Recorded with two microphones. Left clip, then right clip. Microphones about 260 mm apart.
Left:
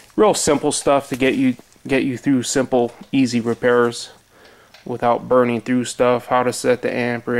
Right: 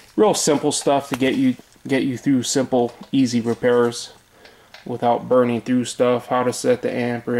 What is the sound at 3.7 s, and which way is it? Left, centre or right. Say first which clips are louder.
Speech: left 1 dB; centre.